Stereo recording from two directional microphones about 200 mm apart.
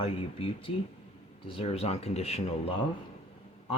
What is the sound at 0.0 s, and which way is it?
Speech, 30° left (ahead or behind).